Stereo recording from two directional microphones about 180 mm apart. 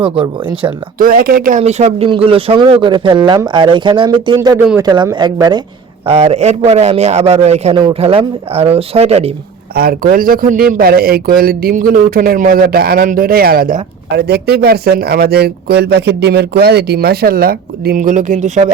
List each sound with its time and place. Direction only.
0.0 s speech: 30° right (ahead or behind)
0.9 s speech: 50° right (ahead or behind); by 4.4 s 25° right (ahead or behind)
4.4 s speech: 15° right (ahead or behind)
6.1 s a man's voice: 35° right (ahead or behind)
9.7 s a man's voice: 55° right (ahead or behind); by 18.7 s 40° right (ahead or behind)